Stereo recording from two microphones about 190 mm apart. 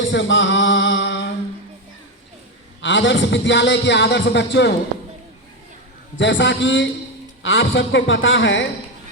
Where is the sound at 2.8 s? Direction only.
75° left (ahead or behind).